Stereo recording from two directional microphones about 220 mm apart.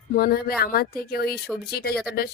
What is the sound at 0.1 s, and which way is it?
A woman's voice, 45° left (ahead or behind).